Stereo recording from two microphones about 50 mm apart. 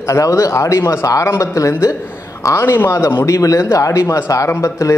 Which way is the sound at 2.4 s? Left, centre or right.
Left.